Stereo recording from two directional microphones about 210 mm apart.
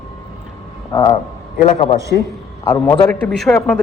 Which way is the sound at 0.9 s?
20° left (ahead or behind).